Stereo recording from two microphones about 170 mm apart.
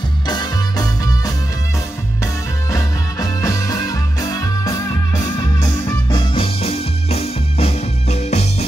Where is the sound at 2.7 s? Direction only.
20° left (ahead or behind).